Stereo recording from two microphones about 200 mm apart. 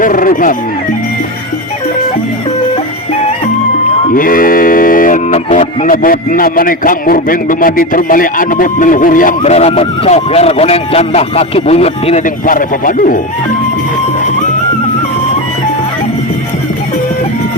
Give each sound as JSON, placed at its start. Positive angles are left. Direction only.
{"t": 0.0, "sound": "speech", "side_deg": 40}
{"t": 4.1, "sound": "speech", "side_deg": 45}